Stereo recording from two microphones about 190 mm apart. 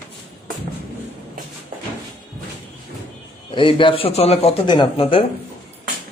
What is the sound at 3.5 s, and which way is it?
Speech, 25° left (ahead or behind).